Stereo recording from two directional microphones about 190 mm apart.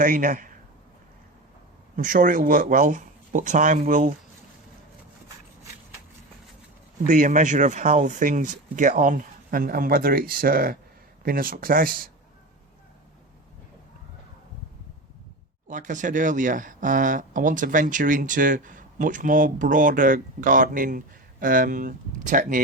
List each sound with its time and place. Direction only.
0.0 s a man's voice: 45° right (ahead or behind)
2.0 s speech: 45° right (ahead or behind)
7.1 s speech: 45° right (ahead or behind)
15.6 s speech: 40° right (ahead or behind)